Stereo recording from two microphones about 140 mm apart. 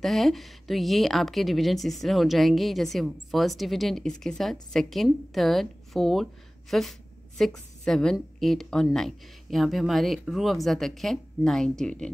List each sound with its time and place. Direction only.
0.0 s a woman's voice: centre (ahead or behind)